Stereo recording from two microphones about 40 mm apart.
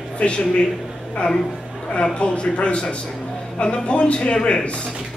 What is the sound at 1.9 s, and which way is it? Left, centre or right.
Speech, left.